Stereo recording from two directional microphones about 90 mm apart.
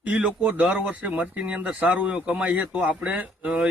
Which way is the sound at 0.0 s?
15° right (ahead or behind).